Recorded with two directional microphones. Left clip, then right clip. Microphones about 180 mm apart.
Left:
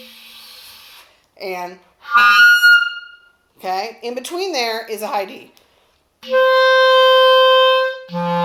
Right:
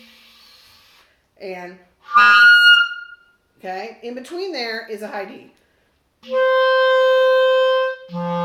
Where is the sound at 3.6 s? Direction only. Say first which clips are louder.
Left 6 dB; centre (ahead or behind).